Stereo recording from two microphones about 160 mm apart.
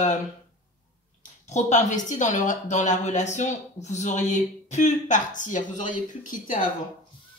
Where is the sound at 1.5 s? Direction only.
50° left (ahead or behind).